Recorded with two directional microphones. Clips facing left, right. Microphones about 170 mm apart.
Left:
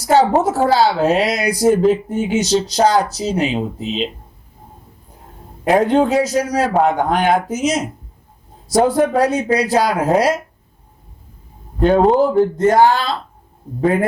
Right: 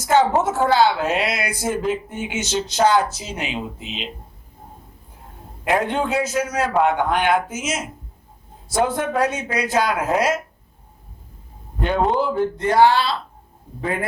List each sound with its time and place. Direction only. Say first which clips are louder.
0.0 s speech: left 4 dB; 35° left (ahead or behind)
5.6 s speech: left 7 dB; 35° left (ahead or behind)
11.8 s speech: left 8 dB; 40° left (ahead or behind)